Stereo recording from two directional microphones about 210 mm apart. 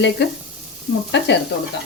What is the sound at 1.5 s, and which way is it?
Speech, 50° left (ahead or behind).